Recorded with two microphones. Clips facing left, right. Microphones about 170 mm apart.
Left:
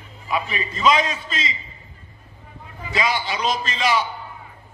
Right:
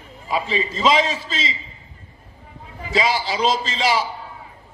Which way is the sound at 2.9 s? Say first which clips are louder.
Right 3 dB; 30° right (ahead or behind).